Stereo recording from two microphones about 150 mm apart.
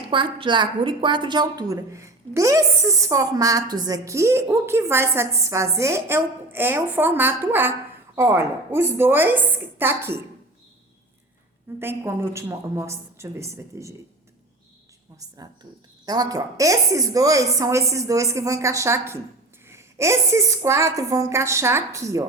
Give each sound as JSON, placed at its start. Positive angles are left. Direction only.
{"t": 0.1, "sound": "a woman's voice", "side_deg": -30}
{"t": 11.8, "sound": "a woman's voice", "side_deg": -15}
{"t": 16.0, "sound": "a woman's voice", "side_deg": -25}